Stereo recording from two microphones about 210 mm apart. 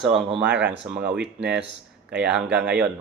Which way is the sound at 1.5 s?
55° right (ahead or behind).